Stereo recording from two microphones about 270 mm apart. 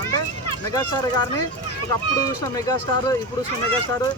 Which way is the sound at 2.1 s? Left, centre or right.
Centre.